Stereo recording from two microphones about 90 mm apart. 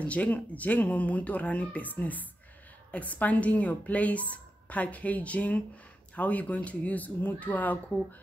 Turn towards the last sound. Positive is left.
turn(degrees=20)  # may be behind; listen again after turning